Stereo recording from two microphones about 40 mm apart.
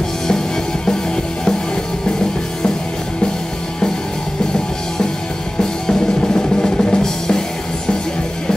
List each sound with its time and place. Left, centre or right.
5.6 s music: centre